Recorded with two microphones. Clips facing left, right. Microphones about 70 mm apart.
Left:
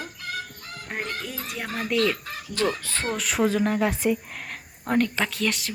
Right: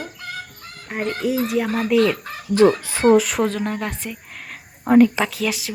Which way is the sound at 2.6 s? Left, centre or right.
Centre.